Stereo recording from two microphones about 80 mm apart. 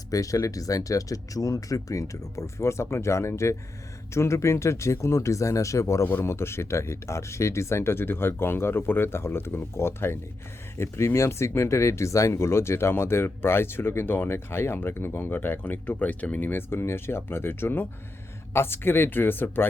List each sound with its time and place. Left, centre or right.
0.1 s speech: left